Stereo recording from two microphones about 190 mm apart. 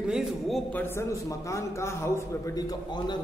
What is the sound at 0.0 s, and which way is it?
A man's voice, centre (ahead or behind).